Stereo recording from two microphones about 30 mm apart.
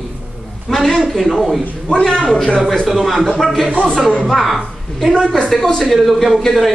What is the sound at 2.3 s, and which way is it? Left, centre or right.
Speech, centre.